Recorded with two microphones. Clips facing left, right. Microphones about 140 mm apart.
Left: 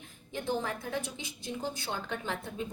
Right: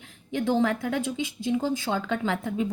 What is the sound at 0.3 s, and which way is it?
A woman's voice, 90° right.